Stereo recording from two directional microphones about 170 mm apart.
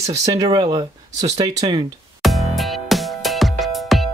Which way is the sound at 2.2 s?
Centre (ahead or behind).